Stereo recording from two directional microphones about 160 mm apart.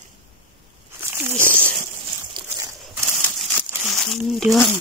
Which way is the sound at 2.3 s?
25° right (ahead or behind).